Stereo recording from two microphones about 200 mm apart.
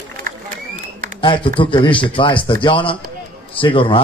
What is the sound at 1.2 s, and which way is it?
Speech, 25° left (ahead or behind).